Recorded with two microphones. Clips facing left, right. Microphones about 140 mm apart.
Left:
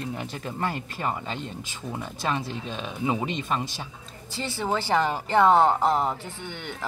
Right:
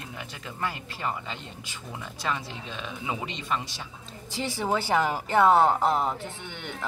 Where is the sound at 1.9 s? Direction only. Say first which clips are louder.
Left 3 dB; 25° left (ahead or behind).